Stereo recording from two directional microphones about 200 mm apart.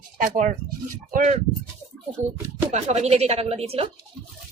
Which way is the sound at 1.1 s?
40° right (ahead or behind).